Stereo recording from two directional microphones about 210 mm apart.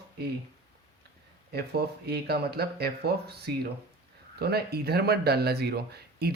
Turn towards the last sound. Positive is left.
turn(degrees=-50)  # may be behind; listen again after turning